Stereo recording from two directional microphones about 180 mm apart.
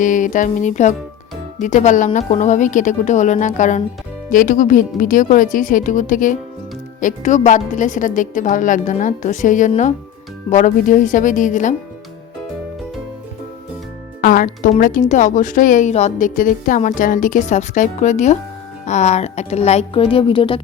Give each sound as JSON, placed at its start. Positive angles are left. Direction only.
{"t": 0.0, "sound": "a woman's voice", "side_deg": 45}
{"t": 14.2, "sound": "a woman's voice", "side_deg": 50}